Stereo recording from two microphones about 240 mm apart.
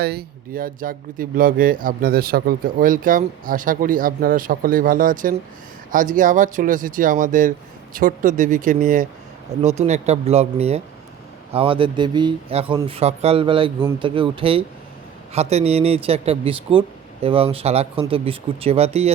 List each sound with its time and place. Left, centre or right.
0.0 s speech: right